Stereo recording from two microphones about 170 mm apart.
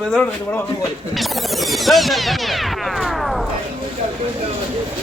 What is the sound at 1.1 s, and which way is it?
Music, centre (ahead or behind).